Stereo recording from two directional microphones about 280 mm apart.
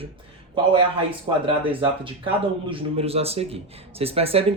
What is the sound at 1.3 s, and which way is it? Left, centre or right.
Speech, centre.